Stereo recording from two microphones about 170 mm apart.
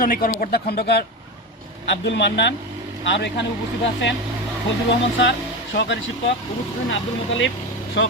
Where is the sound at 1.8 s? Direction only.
90° left.